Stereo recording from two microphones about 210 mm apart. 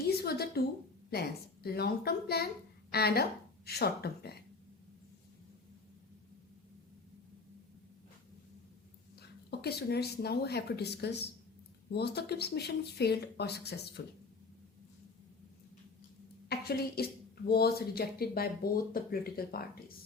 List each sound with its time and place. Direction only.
0.0 s a sound: 50° left (ahead or behind)
1.1 s speech: 50° left (ahead or behind)
9.2 s speech: 50° left (ahead or behind)
16.5 s speech: 50° left (ahead or behind)